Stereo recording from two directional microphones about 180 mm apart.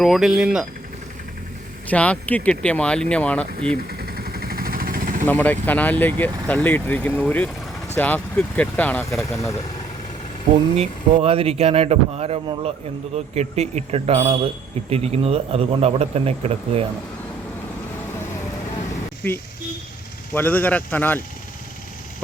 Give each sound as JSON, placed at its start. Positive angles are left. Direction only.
{"t": 0.0, "sound": "speech", "side_deg": 0}
{"t": 1.9, "sound": "speech", "side_deg": 10}
{"t": 3.8, "sound": "vehicle", "side_deg": -55}
{"t": 5.2, "sound": "speech", "side_deg": 10}
{"t": 10.5, "sound": "speech", "side_deg": -35}
{"t": 20.3, "sound": "speech", "side_deg": 10}